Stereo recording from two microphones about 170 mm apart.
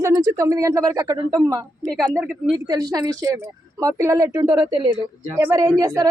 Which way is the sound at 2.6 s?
25° right (ahead or behind).